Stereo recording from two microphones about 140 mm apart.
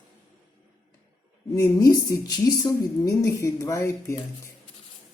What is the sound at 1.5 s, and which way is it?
A woman's voice, 25° left (ahead or behind).